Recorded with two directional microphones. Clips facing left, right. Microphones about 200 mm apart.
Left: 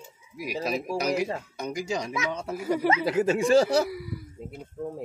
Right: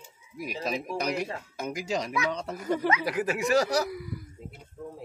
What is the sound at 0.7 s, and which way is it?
Speech, 5° left (ahead or behind).